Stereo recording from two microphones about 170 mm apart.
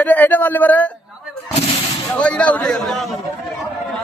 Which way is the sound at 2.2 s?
10° left (ahead or behind).